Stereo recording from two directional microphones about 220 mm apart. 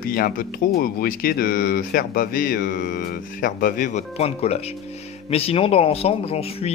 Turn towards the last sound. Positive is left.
turn(degrees=25)  # may be behind; listen again after turning